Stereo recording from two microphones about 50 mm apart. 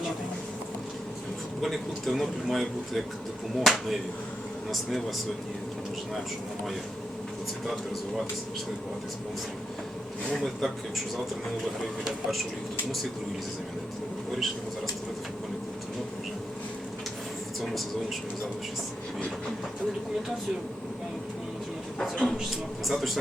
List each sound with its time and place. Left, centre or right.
1.6 s speech: centre
10.3 s speech: centre
12.0 s speech: centre
22.1 s a man's voice: centre
22.4 s speech: centre